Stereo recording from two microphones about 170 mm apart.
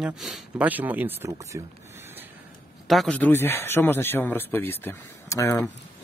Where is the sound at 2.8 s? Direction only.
Centre (ahead or behind).